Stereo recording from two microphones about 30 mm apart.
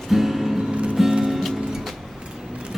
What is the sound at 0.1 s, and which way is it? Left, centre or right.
Music, centre.